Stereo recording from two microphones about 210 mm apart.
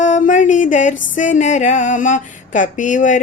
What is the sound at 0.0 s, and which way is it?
Music, 35° left (ahead or behind).